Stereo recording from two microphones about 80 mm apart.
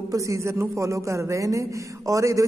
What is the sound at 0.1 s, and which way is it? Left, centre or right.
A man's voice, right.